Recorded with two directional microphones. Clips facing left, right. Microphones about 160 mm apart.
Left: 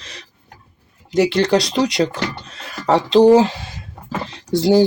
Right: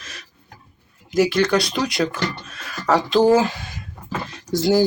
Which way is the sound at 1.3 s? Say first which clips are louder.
Left 3 dB; 30° left (ahead or behind).